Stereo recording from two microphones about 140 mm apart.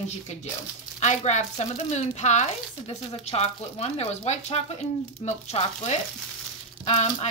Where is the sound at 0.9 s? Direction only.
55° left (ahead or behind).